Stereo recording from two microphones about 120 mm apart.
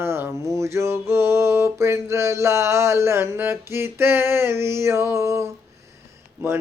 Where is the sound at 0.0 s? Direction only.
25° right (ahead or behind).